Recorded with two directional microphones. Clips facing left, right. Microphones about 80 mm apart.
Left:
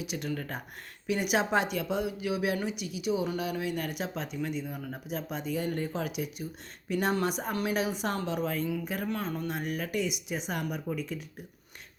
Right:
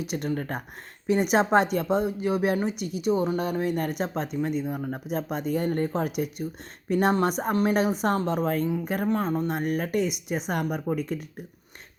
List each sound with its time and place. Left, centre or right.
0.0 s speech: right